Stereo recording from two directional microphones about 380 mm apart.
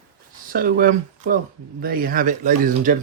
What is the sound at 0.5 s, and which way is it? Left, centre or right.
Speech, right.